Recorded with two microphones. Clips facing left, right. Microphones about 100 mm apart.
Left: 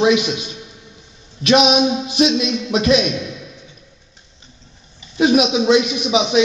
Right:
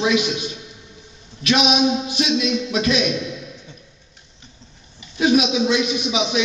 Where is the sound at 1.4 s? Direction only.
25° left (ahead or behind).